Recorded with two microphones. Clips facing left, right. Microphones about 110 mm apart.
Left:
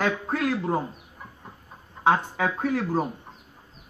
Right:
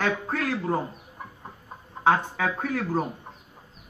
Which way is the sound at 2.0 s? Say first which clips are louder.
Even; 10° left (ahead or behind).